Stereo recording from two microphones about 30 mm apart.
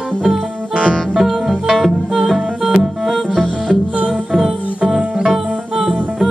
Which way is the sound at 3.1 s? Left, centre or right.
Centre.